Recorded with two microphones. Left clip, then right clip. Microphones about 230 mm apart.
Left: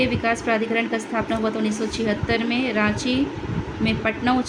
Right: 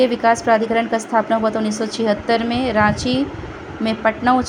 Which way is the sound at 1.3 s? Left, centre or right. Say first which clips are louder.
Right 6 dB; centre.